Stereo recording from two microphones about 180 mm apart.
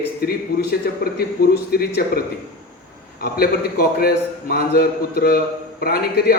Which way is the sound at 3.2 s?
60° left (ahead or behind).